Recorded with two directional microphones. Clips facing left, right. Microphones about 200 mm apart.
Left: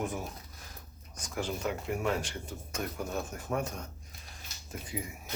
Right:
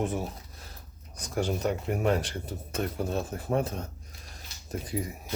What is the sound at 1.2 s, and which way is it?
Speech, 40° right (ahead or behind).